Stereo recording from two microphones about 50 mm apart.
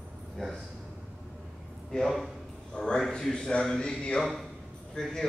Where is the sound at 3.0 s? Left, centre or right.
Centre.